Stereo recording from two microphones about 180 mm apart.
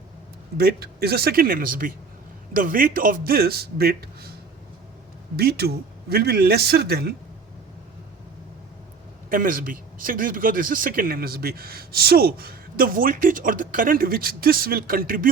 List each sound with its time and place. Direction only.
0.5 s a man's voice: 60° right (ahead or behind)
5.4 s a man's voice: 60° right (ahead or behind)
9.3 s speech: 50° right (ahead or behind)